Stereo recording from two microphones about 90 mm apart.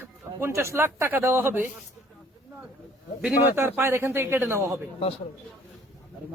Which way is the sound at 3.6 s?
25° right (ahead or behind).